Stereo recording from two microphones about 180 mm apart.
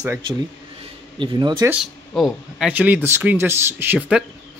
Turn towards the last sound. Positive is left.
turn(degrees=-10)  # may be behind; listen again after turning